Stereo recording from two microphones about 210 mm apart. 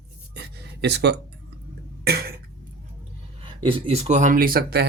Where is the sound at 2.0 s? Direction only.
45° right (ahead or behind).